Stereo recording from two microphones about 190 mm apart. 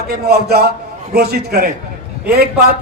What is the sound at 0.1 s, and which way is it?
A man's voice, 55° right (ahead or behind).